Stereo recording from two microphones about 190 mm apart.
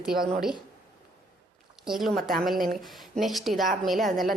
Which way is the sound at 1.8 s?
Centre (ahead or behind).